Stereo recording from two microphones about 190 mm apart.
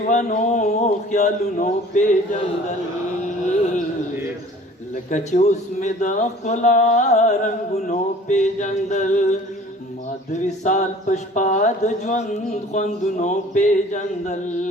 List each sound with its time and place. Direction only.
0.0 s speech: 40° left (ahead or behind)
5.1 s speech: 40° left (ahead or behind)
10.6 s speech: 40° left (ahead or behind)